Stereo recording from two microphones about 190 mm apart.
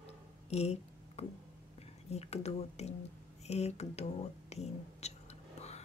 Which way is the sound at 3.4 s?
35° left (ahead or behind).